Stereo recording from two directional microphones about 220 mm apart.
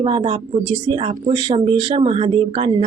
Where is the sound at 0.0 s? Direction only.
25° right (ahead or behind).